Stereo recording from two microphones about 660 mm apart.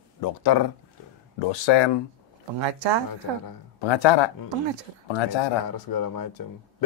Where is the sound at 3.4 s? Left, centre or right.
Left.